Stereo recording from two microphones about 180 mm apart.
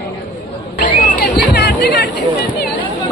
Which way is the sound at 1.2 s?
65° left (ahead or behind).